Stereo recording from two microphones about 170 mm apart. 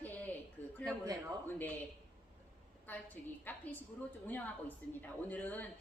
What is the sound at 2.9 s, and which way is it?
A woman's voice, 10° left (ahead or behind).